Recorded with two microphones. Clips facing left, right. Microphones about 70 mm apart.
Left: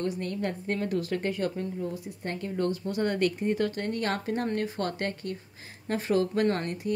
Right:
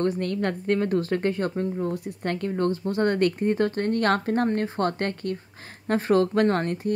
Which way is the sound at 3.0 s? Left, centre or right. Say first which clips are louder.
Right 5 dB; right.